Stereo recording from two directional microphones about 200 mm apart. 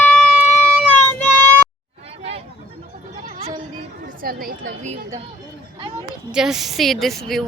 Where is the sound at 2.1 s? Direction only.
30° right (ahead or behind).